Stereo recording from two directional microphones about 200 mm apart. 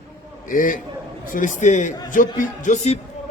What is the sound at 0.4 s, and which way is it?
A man's voice, 45° left (ahead or behind).